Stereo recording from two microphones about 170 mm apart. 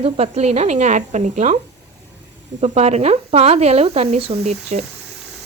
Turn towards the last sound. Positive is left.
turn(degrees=-40)  # may be behind; listen again after turning